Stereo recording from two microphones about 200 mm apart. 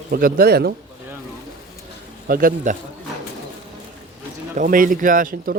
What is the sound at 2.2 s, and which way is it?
Speech, 45° right (ahead or behind).